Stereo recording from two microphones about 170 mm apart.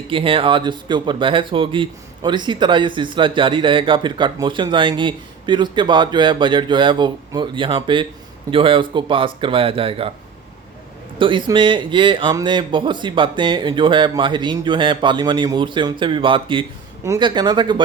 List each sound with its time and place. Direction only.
0.1 s speech: 30° right (ahead or behind)
11.2 s speech: 30° right (ahead or behind)